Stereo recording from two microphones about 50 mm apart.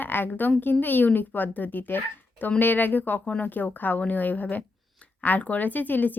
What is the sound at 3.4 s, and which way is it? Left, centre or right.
A woman's voice, left.